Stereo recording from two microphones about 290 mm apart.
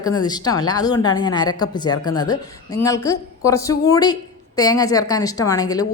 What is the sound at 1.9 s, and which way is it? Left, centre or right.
Speech, left.